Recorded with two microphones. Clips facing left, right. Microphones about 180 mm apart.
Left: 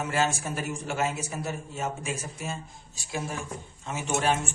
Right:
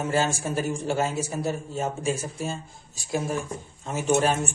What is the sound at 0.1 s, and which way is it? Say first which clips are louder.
A man's voice: right 3 dB; 35° right (ahead or behind).